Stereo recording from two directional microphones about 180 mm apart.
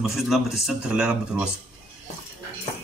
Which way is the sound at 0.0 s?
Centre (ahead or behind).